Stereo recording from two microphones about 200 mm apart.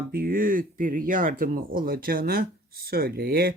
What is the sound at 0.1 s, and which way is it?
Speech, 45° right (ahead or behind).